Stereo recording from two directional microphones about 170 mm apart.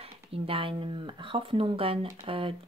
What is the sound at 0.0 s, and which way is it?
Speech, 35° right (ahead or behind).